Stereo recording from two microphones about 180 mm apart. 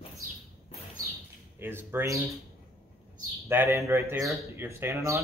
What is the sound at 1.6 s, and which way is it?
Speech, 10° right (ahead or behind).